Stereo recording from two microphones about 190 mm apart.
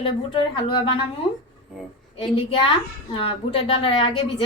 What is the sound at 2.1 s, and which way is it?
A woman's voice, 30° left (ahead or behind).